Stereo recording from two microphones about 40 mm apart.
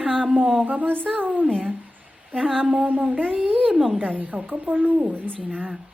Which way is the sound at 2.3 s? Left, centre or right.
Centre.